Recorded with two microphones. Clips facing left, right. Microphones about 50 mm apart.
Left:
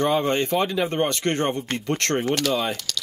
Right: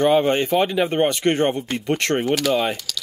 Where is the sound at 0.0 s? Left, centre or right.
Centre.